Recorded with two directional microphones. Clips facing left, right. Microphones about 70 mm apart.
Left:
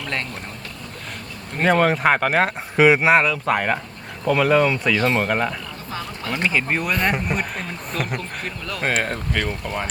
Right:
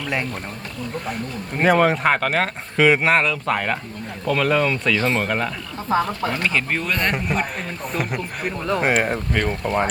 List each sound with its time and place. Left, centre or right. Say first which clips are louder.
0.0 s speech: right 3 dB; centre
1.5 s speech: right 1 dB; centre
4.9 s speech: left 1 dB; centre
5.9 s speech: right 10 dB; right
6.3 s speech: left 6 dB; centre
8.8 s speech: right 1 dB; centre
9.6 s speech: right 6 dB; right